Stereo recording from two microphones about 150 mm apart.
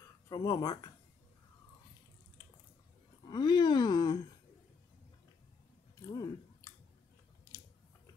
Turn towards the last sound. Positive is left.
turn(degrees=20)  # may be behind; listen again after turning